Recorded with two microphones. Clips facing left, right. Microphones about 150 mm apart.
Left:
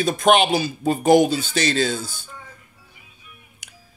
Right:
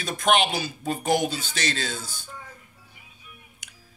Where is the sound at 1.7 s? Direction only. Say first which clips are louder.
Left 10 dB; 30° left (ahead or behind).